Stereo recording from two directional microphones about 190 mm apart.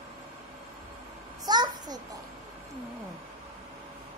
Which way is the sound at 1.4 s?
20° right (ahead or behind).